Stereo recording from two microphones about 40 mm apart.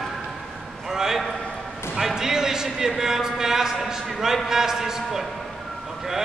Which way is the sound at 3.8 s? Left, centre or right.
Centre.